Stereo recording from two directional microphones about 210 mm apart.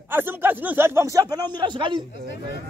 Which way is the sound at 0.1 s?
10° right (ahead or behind).